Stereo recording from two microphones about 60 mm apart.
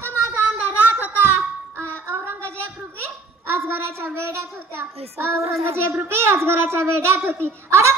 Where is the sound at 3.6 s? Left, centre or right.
Right.